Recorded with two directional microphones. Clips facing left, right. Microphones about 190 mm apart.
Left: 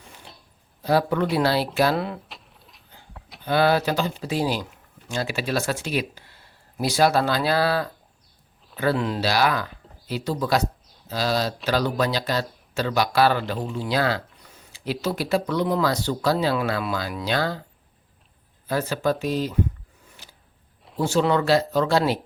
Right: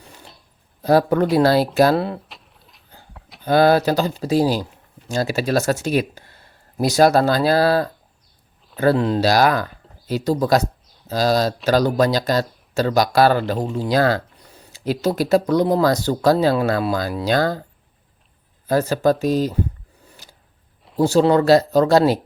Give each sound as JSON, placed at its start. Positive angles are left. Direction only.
{"t": 0.8, "sound": "speech", "side_deg": -45}
{"t": 2.3, "sound": "a sound", "side_deg": 0}
{"t": 3.4, "sound": "speech", "side_deg": -40}
{"t": 18.7, "sound": "speech", "side_deg": -40}
{"t": 20.1, "sound": "a sound", "side_deg": -40}
{"t": 21.0, "sound": "speech", "side_deg": -35}